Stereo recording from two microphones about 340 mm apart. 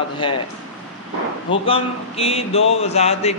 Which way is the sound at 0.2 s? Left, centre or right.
Centre.